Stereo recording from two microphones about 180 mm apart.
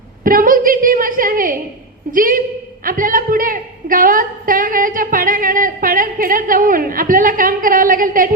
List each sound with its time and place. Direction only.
0.3 s a woman's voice: 50° right (ahead or behind)